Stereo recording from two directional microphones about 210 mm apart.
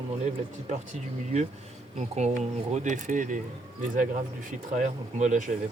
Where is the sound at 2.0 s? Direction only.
30° right (ahead or behind).